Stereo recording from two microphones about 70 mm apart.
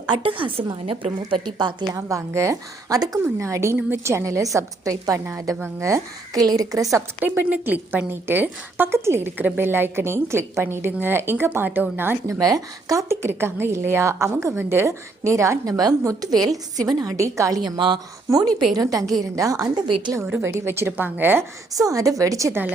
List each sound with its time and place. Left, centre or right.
1.2 s a woman's voice: right
2.0 s a woman's voice: right
3.8 s a woman's voice: right
6.4 s a woman's voice: right
7.2 s a woman's voice: right
12.3 s a woman's voice: right
13.1 s a woman's voice: right
17.6 s a woman's voice: right
18.3 s a woman's voice: right
20.4 s a woman's voice: right
21.8 s a woman's voice: right